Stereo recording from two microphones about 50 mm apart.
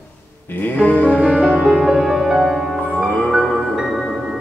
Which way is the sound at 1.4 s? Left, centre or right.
Centre.